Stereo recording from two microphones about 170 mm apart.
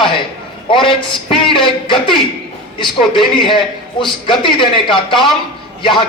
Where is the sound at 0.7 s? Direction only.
30° left (ahead or behind).